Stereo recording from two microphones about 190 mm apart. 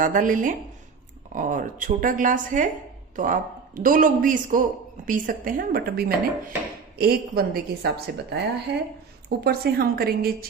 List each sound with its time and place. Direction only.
0.0 s a man's voice: 45° right (ahead or behind)